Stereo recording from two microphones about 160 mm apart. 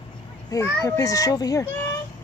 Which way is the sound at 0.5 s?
20° left (ahead or behind).